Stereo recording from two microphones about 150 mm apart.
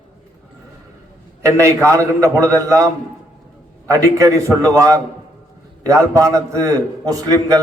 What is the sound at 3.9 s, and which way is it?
A man's voice, 25° right (ahead or behind).